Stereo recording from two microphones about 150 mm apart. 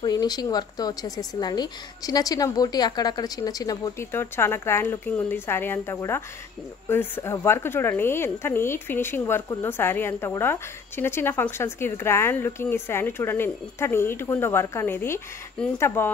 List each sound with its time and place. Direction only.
0.0 s a woman's voice: 25° left (ahead or behind)